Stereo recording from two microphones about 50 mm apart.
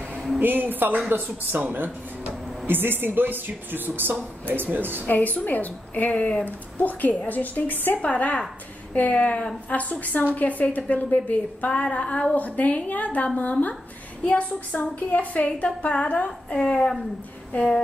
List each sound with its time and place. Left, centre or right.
0.4 s speech: right
5.0 s speech: left
6.1 s a woman's voice: left
6.4 s a woman's voice: left
16.5 s a woman's voice: centre